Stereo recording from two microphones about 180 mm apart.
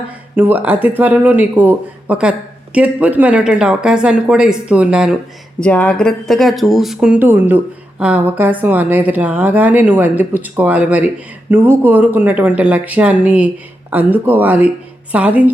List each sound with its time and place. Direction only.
0.3 s speech: 10° right (ahead or behind)
5.5 s speech: 5° left (ahead or behind); by 15.5 s 10° right (ahead or behind)